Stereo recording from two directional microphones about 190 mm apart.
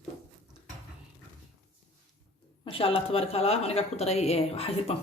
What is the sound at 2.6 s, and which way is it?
Speech, 30° left (ahead or behind).